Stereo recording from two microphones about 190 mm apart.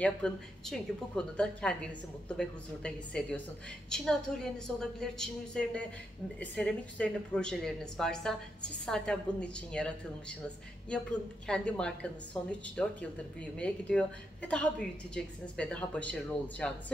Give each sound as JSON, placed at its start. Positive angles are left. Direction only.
{"t": 0.0, "sound": "a woman's voice", "side_deg": 5}